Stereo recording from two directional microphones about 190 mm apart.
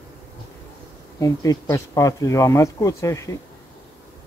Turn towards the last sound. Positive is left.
turn(degrees=15)  # may be behind; listen again after turning